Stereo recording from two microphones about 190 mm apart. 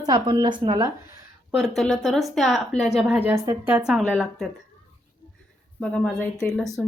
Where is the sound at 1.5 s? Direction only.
Centre (ahead or behind).